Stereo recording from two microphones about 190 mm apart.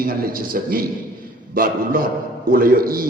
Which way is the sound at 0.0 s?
50° right (ahead or behind).